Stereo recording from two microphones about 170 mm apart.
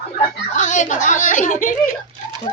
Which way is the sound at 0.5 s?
45° left (ahead or behind).